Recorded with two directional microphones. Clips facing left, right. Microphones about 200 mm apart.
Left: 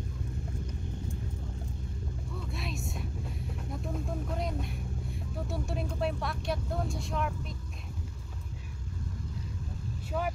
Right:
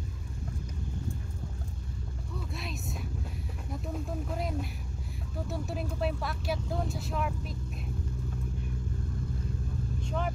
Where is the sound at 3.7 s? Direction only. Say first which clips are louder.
Right 1 dB; centre (ahead or behind).